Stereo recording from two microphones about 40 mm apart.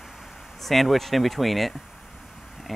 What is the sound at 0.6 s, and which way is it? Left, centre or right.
Speech, centre.